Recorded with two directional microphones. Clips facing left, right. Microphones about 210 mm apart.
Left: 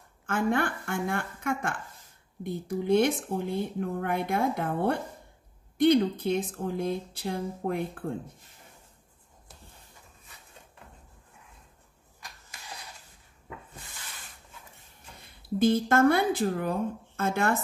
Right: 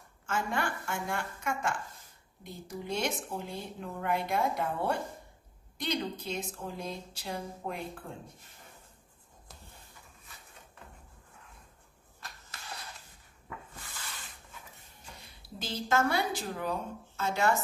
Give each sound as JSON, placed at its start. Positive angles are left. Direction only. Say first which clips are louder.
{"t": 0.3, "sound": "speech", "louder": "left 6 dB", "side_deg": 55}
{"t": 15.1, "sound": "speech", "louder": "left 18 dB", "side_deg": 55}